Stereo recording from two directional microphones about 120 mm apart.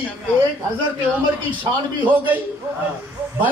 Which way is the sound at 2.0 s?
15° right (ahead or behind).